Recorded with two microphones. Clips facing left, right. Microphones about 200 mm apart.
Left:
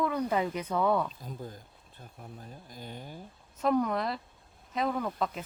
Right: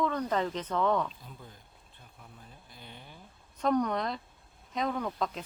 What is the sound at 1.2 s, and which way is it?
Speech, 40° left (ahead or behind).